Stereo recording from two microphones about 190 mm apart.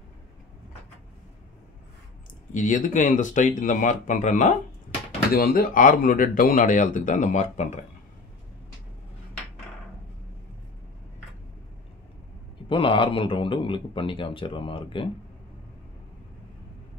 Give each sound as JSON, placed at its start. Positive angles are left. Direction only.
{"t": 2.5, "sound": "speech", "side_deg": 45}
{"t": 5.3, "sound": "speech", "side_deg": 50}
{"t": 12.6, "sound": "a man's voice", "side_deg": 25}